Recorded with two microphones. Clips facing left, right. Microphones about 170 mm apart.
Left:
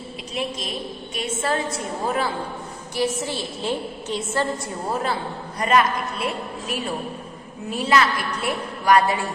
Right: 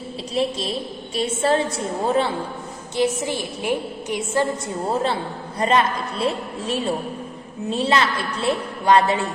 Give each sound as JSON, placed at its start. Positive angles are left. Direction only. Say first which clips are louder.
{"t": 0.3, "sound": "a woman's voice", "louder": "right 5 dB", "side_deg": -30}
{"t": 5.5, "sound": "a woman's voice", "louder": "even", "side_deg": -30}